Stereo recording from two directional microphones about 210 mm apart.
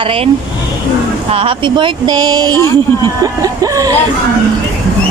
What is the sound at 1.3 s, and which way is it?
A woman's voice, 25° right (ahead or behind).